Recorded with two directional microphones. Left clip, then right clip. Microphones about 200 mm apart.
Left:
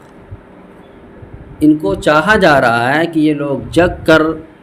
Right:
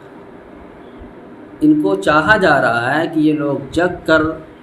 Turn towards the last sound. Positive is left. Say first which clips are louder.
# left 4 dB
turn(degrees=50)  # may be behind; listen again after turning